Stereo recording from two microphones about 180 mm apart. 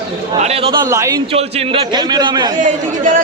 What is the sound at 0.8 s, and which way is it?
Speech, 15° right (ahead or behind).